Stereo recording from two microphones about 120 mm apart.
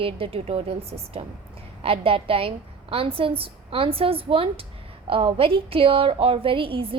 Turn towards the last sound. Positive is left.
turn(degrees=-50)  # may be behind; listen again after turning